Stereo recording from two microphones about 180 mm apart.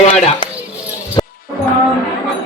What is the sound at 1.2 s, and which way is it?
Music, 25° left (ahead or behind).